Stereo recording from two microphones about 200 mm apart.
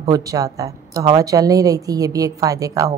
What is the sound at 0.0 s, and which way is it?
A woman's voice, 15° right (ahead or behind).